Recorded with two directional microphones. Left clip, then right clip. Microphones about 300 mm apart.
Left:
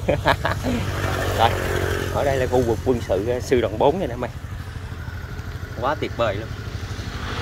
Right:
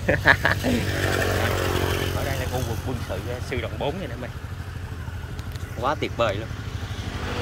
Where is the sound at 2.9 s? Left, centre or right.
Left.